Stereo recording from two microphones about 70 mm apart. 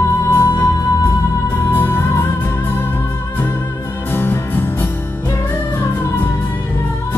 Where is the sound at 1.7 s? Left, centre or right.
Left.